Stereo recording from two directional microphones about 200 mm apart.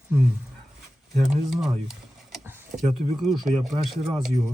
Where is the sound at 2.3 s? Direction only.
10° right (ahead or behind).